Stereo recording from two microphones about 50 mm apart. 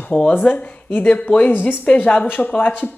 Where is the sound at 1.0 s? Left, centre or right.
Left.